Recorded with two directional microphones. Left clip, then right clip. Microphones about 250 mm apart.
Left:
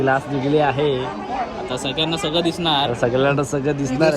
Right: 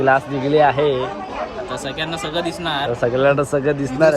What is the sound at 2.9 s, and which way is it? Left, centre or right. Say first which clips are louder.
Speech: right 2 dB; centre.